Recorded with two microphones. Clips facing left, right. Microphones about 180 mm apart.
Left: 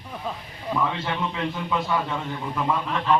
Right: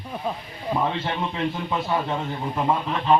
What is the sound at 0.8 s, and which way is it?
Speech, 35° right (ahead or behind).